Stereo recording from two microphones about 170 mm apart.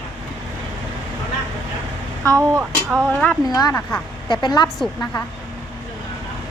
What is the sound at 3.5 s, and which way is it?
A woman's voice, 20° left (ahead or behind).